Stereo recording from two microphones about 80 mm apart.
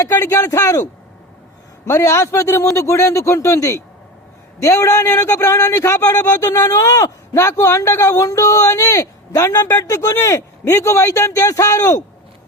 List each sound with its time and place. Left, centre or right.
0.0 s a man's voice: left
1.9 s speech: left
8.0 s a man's voice: left